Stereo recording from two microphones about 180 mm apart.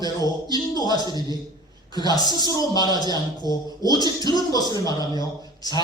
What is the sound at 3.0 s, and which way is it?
Speech, 25° right (ahead or behind).